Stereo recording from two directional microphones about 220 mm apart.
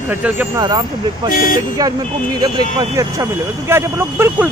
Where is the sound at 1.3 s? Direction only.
40° left (ahead or behind).